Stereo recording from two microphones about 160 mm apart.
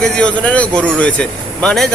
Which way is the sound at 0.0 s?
5° left (ahead or behind).